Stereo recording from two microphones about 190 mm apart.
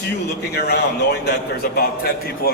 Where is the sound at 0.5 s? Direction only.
60° left (ahead or behind).